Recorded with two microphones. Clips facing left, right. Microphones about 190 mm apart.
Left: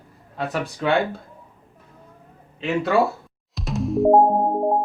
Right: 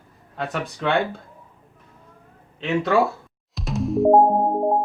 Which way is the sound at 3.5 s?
Centre (ahead or behind).